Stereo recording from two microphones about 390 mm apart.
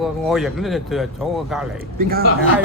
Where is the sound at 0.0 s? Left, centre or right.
Centre.